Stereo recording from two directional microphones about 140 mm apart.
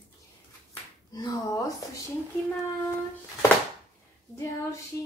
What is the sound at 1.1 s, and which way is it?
Speech, 25° left (ahead or behind).